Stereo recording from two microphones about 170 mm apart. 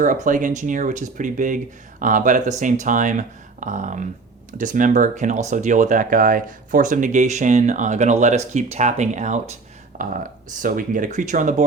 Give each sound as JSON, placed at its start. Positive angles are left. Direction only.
{"t": 0.0, "sound": "speech", "side_deg": -50}